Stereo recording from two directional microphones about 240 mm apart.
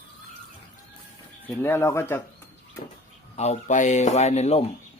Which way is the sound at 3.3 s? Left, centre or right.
Left.